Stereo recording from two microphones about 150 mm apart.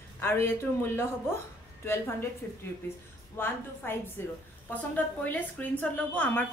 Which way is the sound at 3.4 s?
15° left (ahead or behind).